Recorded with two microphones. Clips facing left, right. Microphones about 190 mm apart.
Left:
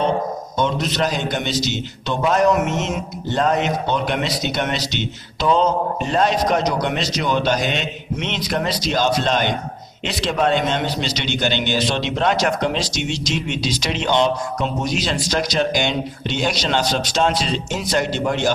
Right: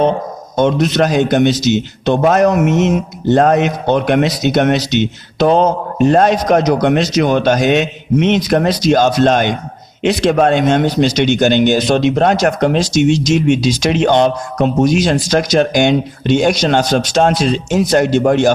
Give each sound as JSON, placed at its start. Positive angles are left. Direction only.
{"t": 0.5, "sound": "a man's voice", "side_deg": -50}